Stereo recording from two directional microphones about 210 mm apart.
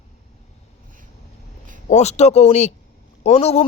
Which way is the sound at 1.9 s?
30° left (ahead or behind).